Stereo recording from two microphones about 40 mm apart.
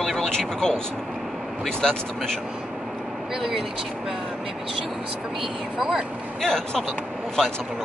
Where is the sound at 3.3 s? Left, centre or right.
Centre.